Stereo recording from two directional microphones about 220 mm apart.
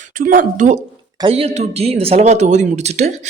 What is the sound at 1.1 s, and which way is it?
A man's voice, 25° right (ahead or behind).